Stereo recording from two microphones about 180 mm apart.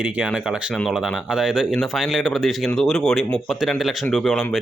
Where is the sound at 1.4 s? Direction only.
5° right (ahead or behind).